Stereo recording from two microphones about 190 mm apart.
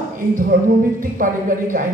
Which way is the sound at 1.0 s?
45° right (ahead or behind).